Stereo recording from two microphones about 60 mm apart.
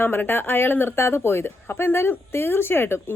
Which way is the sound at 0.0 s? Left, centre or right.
Left.